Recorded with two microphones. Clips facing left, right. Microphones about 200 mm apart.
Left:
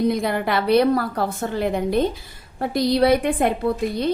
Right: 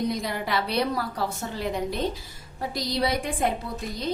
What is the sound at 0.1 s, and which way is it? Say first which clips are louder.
A woman's voice: left 7 dB; 55° left (ahead or behind).